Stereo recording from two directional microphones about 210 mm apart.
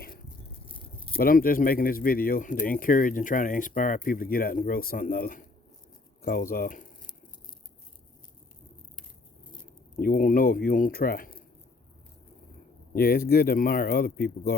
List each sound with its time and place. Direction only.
0.6 s rattle: 25° left (ahead or behind)
1.2 s speech: 45° left (ahead or behind)
9.9 s speech: 45° left (ahead or behind)
12.9 s speech: 45° left (ahead or behind)